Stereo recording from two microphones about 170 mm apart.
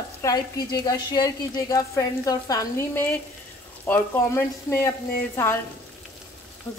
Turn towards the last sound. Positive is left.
turn(degrees=15)  # may be behind; listen again after turning